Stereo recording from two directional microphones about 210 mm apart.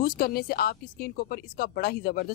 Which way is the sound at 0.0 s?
45° left (ahead or behind).